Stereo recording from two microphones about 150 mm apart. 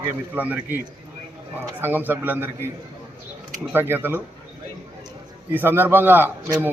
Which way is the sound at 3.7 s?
15° right (ahead or behind).